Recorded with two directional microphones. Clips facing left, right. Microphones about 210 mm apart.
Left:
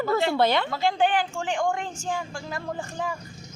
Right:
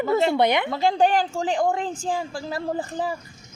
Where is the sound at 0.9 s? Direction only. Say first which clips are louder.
Right 3 dB; 40° right (ahead or behind).